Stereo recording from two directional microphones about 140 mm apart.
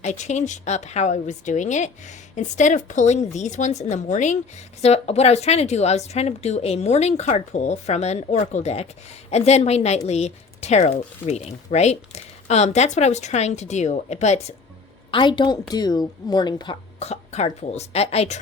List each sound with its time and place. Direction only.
0.0 s speech: 55° left (ahead or behind)
15.1 s speech: 35° left (ahead or behind)
17.0 s speech: 50° left (ahead or behind)